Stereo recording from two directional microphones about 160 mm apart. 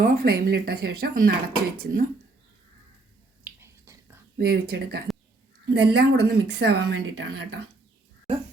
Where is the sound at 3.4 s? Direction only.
15° right (ahead or behind).